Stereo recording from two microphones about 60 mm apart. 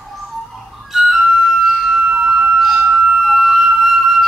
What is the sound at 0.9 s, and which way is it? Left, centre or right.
Music, centre.